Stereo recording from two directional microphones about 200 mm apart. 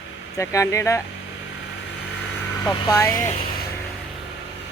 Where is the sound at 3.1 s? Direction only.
40° left (ahead or behind).